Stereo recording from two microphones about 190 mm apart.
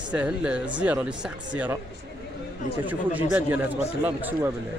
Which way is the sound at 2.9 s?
10° right (ahead or behind).